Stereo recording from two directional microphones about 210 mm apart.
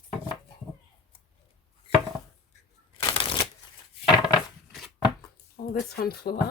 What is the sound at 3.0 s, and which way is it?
Shuffling cards, 20° left (ahead or behind).